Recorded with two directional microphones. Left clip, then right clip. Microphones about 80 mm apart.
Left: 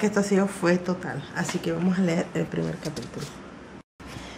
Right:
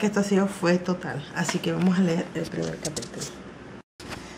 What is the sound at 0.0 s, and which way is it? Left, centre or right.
Speech, centre.